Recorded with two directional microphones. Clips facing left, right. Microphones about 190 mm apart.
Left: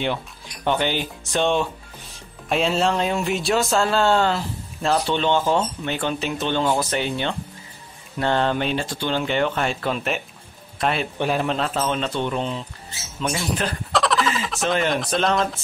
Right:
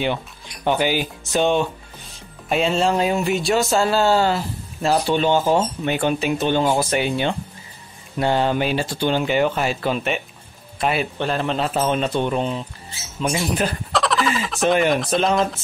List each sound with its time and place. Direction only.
0.7 s speech: 10° right (ahead or behind)
11.1 s speech: 10° left (ahead or behind)
11.5 s speech: 5° right (ahead or behind)
13.9 s a sound: centre (ahead or behind)
14.6 s speech: 15° right (ahead or behind)
15.0 s speech: centre (ahead or behind)